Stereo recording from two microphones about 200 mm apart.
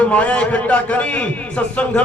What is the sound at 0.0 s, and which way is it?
A man's voice, 5° left (ahead or behind).